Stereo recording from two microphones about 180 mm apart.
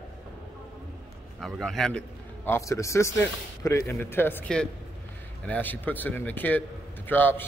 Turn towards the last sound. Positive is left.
turn(degrees=10)  # may be behind; listen again after turning